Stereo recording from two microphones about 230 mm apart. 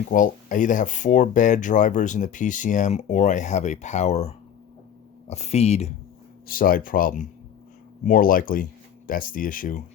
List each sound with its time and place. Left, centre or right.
0.1 s speech: left
6.5 s speech: left